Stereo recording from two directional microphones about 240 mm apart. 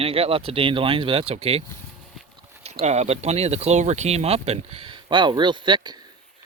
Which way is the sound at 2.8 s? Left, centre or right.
Right.